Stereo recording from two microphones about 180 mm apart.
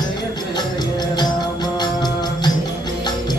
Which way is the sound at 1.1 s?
25° left (ahead or behind).